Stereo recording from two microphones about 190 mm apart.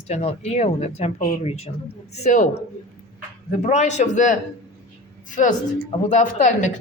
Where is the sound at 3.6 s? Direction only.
35° left (ahead or behind).